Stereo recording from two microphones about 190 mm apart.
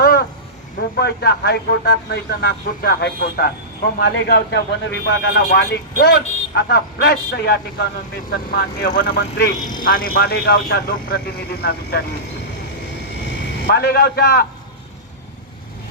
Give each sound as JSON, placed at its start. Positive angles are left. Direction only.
{"t": 0.0, "sound": "vehicle", "side_deg": 55}
{"t": 0.9, "sound": "speech", "side_deg": 60}
{"t": 13.7, "sound": "speech", "side_deg": 55}